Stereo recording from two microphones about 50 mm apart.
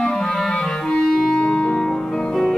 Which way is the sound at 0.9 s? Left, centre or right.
Centre.